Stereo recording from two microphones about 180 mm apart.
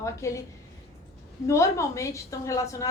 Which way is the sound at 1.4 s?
15° left (ahead or behind).